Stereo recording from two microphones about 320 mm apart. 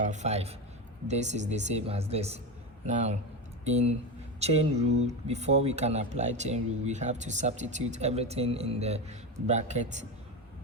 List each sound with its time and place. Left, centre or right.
0.0 s speech: right